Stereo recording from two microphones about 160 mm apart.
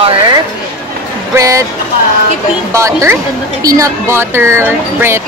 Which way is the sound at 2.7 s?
20° right (ahead or behind).